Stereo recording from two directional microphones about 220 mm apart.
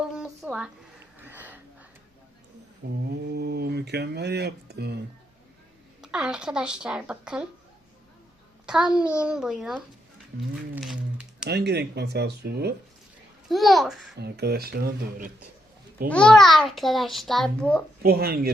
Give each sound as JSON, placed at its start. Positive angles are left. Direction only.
{"t": 0.0, "sound": "a sound", "side_deg": 0}
{"t": 2.8, "sound": "speech", "side_deg": -45}
{"t": 6.0, "sound": "a child's voice", "side_deg": -5}
{"t": 8.6, "sound": "a child's voice", "side_deg": -5}
{"t": 10.5, "sound": "a sound", "side_deg": 0}
{"t": 11.4, "sound": "speech", "side_deg": -50}
{"t": 13.5, "sound": "a child's voice", "side_deg": 0}
{"t": 14.2, "sound": "speech", "side_deg": -50}
{"t": 16.0, "sound": "a child's voice", "side_deg": 5}
{"t": 18.0, "sound": "speech", "side_deg": -45}